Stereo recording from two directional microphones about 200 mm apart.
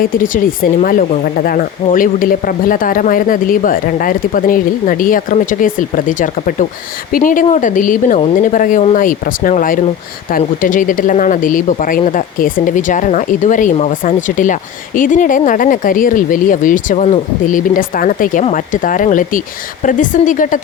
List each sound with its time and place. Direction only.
0.2 s speech: 45° left (ahead or behind)